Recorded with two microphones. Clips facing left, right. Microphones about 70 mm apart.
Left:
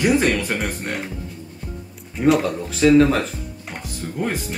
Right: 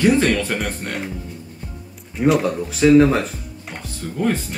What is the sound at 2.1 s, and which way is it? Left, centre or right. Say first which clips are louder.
Speech: even; centre.